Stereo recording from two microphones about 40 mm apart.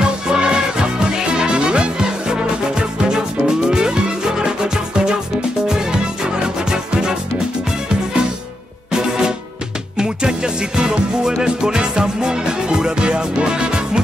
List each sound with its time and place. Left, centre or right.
0.0 s music: right
6.6 s music: centre
8.9 s music: centre